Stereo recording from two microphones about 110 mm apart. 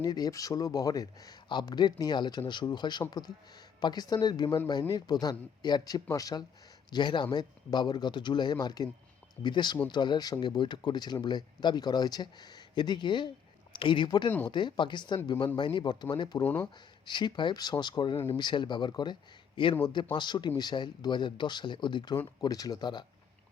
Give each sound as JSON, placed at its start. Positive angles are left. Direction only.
{"t": 0.0, "sound": "speech", "side_deg": 35}
{"t": 4.7, "sound": "speech", "side_deg": 35}
{"t": 6.9, "sound": "speech", "side_deg": 45}
{"t": 20.1, "sound": "speech", "side_deg": 45}